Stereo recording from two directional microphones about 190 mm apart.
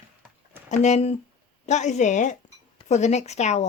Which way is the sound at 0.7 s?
35° left (ahead or behind).